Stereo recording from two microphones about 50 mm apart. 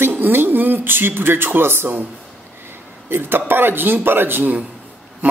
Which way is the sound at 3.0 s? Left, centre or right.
Right.